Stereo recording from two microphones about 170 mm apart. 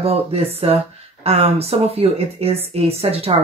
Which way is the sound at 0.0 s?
35° right (ahead or behind).